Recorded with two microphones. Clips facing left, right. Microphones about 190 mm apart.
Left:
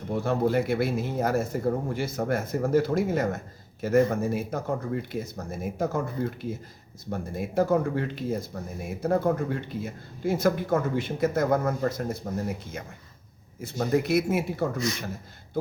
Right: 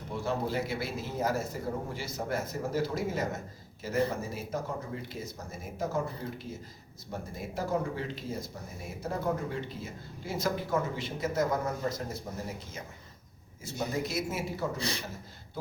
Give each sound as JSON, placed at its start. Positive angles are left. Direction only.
{"t": 0.1, "sound": "a man's voice", "side_deg": 55}
{"t": 13.6, "sound": "a man's voice", "side_deg": 60}
{"t": 14.8, "sound": "a man's voice", "side_deg": -30}